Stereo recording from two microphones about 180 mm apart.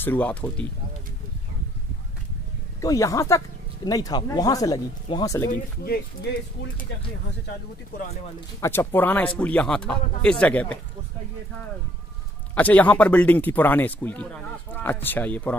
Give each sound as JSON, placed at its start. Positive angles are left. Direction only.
{"t": 0.0, "sound": "speech", "side_deg": 10}
{"t": 2.8, "sound": "speech", "side_deg": 20}
{"t": 8.5, "sound": "speech", "side_deg": 15}
{"t": 12.5, "sound": "speech", "side_deg": 10}